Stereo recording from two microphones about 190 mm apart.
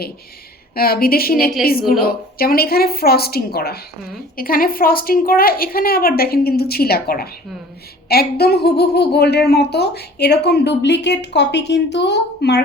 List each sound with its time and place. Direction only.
0.8 s a woman's voice: 50° left (ahead or behind)